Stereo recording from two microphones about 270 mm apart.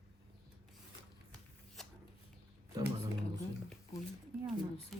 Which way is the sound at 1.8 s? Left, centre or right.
Centre.